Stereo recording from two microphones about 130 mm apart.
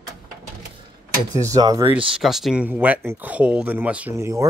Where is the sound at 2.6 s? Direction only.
15° right (ahead or behind).